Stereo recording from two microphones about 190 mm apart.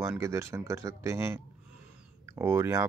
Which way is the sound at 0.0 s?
15° right (ahead or behind).